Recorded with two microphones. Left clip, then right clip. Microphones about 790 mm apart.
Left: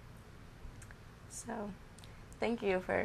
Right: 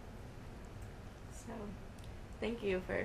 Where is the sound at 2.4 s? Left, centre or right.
Left.